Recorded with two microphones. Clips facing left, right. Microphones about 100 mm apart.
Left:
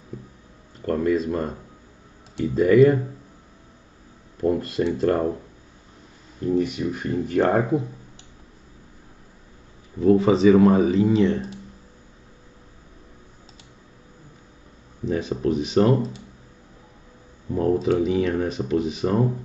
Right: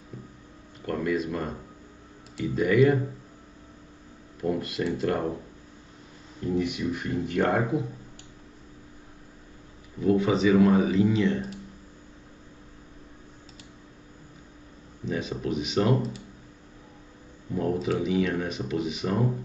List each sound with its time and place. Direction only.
0.8 s speech: 40° left (ahead or behind)
4.4 s speech: 35° left (ahead or behind)
6.5 s speech: 40° left (ahead or behind)
10.0 s speech: 35° left (ahead or behind)
15.0 s speech: 35° left (ahead or behind)
17.6 s speech: 40° left (ahead or behind)